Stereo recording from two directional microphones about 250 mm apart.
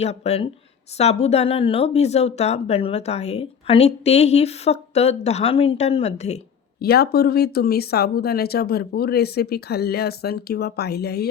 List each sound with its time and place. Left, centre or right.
0.0 s speech: left
6.8 s speech: left